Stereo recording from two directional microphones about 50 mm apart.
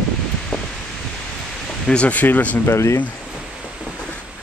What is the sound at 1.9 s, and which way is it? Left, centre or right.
Speech, left.